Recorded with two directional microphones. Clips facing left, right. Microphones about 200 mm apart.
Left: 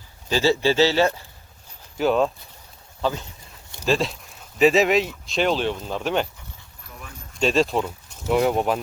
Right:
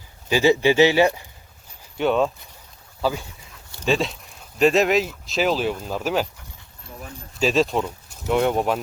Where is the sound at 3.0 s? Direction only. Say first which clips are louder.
Right 1 dB; 10° right (ahead or behind).